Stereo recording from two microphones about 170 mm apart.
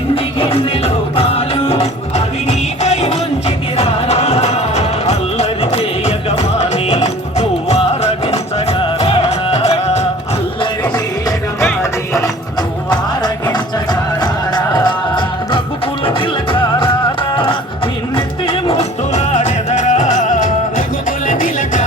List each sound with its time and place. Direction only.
0.3 s music: 35° left (ahead or behind)
10.6 s music: 25° left (ahead or behind)
14.2 s music: 25° left (ahead or behind); by 21.8 s 50° left (ahead or behind)